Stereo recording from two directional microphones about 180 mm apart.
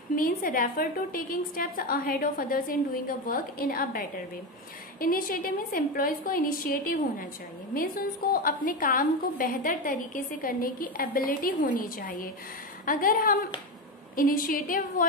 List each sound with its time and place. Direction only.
0.1 s a woman's voice: 50° left (ahead or behind)
5.0 s a woman's voice: 50° left (ahead or behind)